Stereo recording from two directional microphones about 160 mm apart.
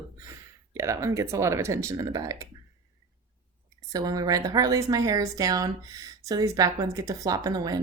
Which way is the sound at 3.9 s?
20° right (ahead or behind).